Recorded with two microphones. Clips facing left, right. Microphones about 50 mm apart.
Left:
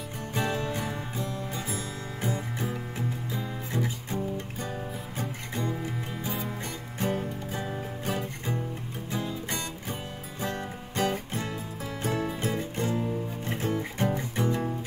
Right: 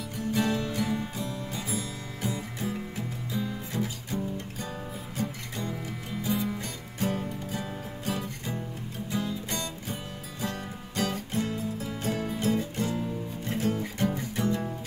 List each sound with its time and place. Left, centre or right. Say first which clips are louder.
0.3 s music: right 2 dB; left
7.5 s music: left 2 dB; left